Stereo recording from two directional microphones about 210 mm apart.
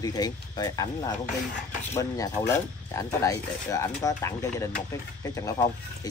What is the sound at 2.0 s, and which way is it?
Speech, 15° left (ahead or behind).